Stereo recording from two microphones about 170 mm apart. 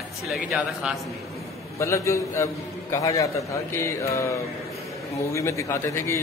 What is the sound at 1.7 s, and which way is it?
A man's voice, 15° left (ahead or behind).